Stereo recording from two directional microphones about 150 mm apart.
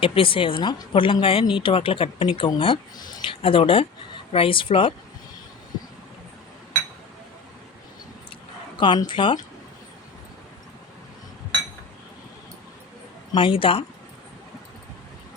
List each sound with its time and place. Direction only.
0.0 s speech: 35° left (ahead or behind)
8.8 s speech: 30° left (ahead or behind)
13.3 s speech: 35° left (ahead or behind)